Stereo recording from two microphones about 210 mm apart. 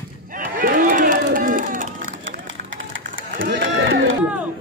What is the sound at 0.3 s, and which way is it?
Run, 40° right (ahead or behind).